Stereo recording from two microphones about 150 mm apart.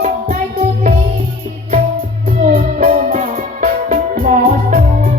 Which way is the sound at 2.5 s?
60° right (ahead or behind).